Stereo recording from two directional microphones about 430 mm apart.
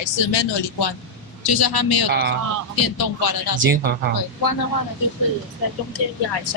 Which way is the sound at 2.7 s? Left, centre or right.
Left.